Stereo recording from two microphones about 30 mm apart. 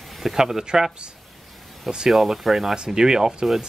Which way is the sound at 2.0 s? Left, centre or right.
Centre.